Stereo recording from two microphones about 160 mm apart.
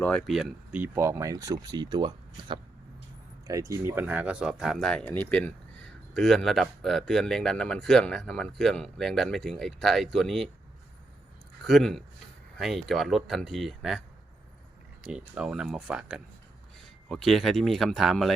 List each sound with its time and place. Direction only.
0.0 s speech: 5° left (ahead or behind)
0.8 s speech: 15° right (ahead or behind)
11.6 s speech: centre (ahead or behind)
15.0 s speech: 5° right (ahead or behind)